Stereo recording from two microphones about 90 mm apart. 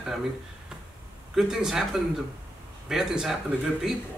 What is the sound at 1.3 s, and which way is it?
Speech, 5° right (ahead or behind).